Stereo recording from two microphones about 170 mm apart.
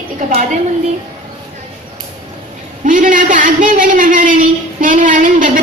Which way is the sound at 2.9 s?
50° right (ahead or behind).